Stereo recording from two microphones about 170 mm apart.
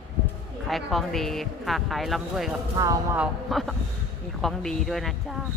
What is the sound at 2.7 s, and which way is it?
Speech, 20° right (ahead or behind).